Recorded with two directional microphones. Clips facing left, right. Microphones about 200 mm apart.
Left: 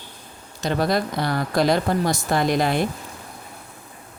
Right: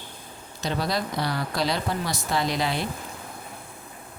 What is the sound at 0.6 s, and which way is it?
Speech, 50° left (ahead or behind).